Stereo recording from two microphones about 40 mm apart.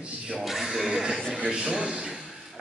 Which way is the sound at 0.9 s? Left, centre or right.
Centre.